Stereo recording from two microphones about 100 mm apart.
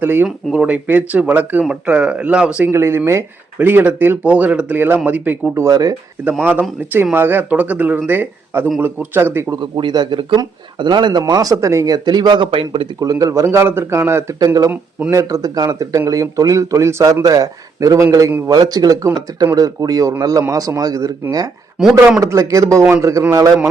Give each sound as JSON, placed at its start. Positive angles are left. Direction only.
{"t": 0.0, "sound": "speech", "side_deg": -20}
{"t": 2.6, "sound": "speech", "side_deg": -25}
{"t": 5.6, "sound": "speech", "side_deg": -35}
{"t": 6.4, "sound": "speech", "side_deg": -20}
{"t": 9.6, "sound": "a man's voice", "side_deg": -45}
{"t": 12.0, "sound": "a man's voice", "side_deg": -45}
{"t": 13.0, "sound": "speech", "side_deg": -35}
{"t": 14.3, "sound": "speech", "side_deg": -35}
{"t": 14.7, "sound": "speech", "side_deg": -20}
{"t": 15.1, "sound": "speech", "side_deg": -35}
{"t": 21.8, "sound": "a man's voice", "side_deg": -5}
{"t": 22.2, "sound": "speech", "side_deg": -30}